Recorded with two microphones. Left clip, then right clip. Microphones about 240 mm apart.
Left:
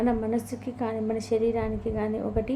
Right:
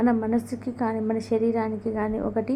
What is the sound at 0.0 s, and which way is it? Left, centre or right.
A woman's voice, centre.